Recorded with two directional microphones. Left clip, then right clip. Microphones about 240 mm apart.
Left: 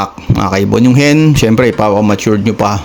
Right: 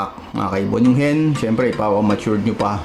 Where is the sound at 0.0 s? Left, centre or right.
Left.